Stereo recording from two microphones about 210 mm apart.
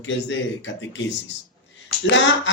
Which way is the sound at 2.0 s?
60° left (ahead or behind).